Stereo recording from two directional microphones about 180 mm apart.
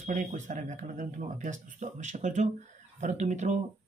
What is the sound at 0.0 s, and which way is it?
Speech, 45° right (ahead or behind).